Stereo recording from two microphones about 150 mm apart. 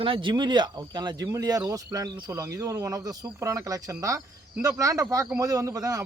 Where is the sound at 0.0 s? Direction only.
35° right (ahead or behind).